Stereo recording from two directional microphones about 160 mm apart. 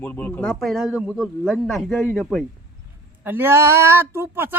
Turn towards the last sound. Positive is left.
turn(degrees=-15)  # may be behind; listen again after turning